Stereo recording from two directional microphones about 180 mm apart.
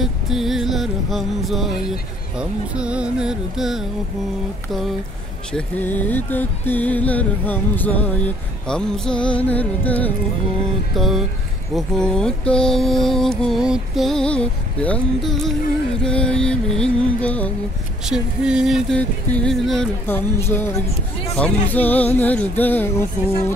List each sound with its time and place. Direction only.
0.0 s mantra: centre (ahead or behind)
5.5 s music: 10° left (ahead or behind)
8.6 s mantra: 5° left (ahead or behind)
9.4 s music: 10° left (ahead or behind)
11.0 s mantra: centre (ahead or behind)
18.0 s mantra: 5° right (ahead or behind)
20.3 s music: 10° left (ahead or behind)